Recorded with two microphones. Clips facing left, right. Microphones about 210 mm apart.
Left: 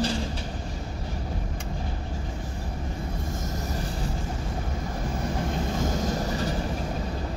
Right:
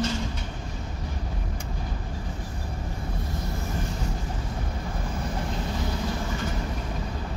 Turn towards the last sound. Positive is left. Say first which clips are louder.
# left 3 dB
turn(degrees=40)  # may be behind; listen again after turning